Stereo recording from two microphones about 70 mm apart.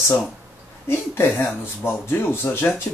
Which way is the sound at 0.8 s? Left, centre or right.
Left.